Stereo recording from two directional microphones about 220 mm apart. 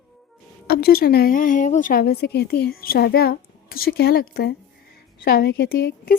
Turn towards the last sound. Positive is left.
turn(degrees=45)  # may be behind; listen again after turning